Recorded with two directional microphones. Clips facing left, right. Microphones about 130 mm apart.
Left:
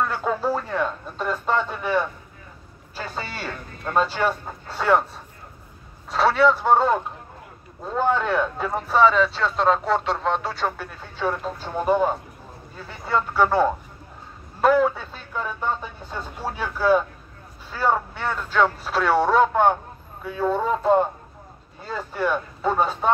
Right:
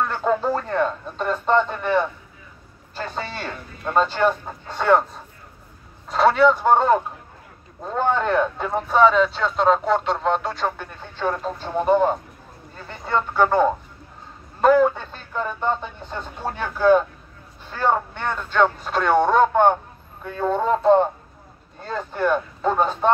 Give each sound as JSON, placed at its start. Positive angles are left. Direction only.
{"t": 0.1, "sound": "a sound", "side_deg": 5}
{"t": 3.8, "sound": "speech", "side_deg": 5}
{"t": 6.0, "sound": "speech", "side_deg": 0}